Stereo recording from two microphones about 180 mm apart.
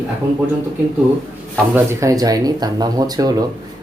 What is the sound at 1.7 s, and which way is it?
Speech, 15° right (ahead or behind).